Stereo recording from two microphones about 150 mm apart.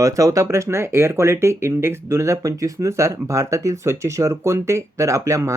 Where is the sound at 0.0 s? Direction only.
20° right (ahead or behind).